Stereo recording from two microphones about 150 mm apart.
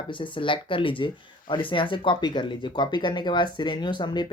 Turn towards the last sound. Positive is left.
turn(degrees=30)  # may be behind; listen again after turning